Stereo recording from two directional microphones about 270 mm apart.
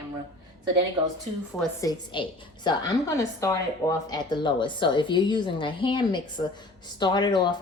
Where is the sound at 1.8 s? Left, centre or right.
Centre.